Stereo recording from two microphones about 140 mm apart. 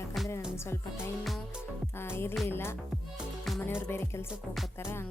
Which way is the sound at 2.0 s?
15° left (ahead or behind).